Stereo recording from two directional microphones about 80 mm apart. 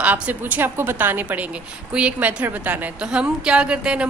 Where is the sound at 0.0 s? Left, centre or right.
Centre.